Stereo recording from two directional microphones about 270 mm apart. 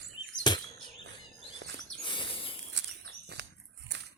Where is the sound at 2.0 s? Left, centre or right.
Centre.